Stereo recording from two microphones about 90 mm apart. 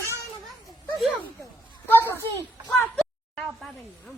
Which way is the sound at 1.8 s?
25° left (ahead or behind).